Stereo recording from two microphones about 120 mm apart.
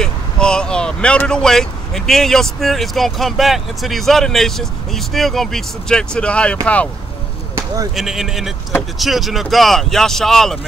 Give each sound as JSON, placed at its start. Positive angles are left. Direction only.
{"t": 0.0, "sound": "speech", "side_deg": 5}
{"t": 7.5, "sound": "basketball bounce", "side_deg": -30}
{"t": 7.9, "sound": "speech", "side_deg": 0}